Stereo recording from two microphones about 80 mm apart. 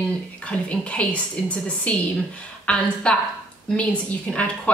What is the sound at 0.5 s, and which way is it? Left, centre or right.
A woman's voice, centre.